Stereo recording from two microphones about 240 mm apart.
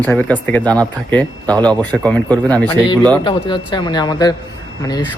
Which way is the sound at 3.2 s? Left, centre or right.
Centre.